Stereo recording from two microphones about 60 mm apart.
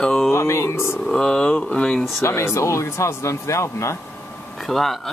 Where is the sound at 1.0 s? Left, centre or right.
Centre.